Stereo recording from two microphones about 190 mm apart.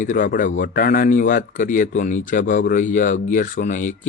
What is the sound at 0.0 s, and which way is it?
Speech, 45° left (ahead or behind).